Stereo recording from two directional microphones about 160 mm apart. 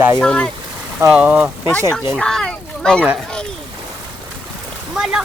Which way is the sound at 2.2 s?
5° left (ahead or behind).